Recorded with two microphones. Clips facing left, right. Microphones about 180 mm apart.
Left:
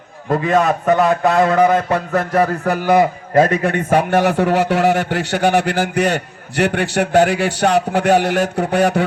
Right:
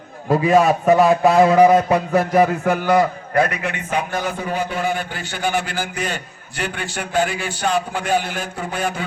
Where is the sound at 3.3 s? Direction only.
30° left (ahead or behind).